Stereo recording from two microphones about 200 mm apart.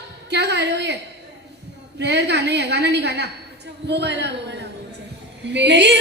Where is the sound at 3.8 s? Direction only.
60° right (ahead or behind).